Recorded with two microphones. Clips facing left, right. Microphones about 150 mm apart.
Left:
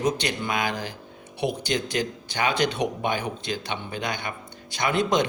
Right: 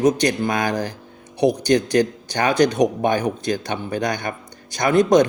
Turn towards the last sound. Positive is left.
turn(degrees=-40)  # may be behind; listen again after turning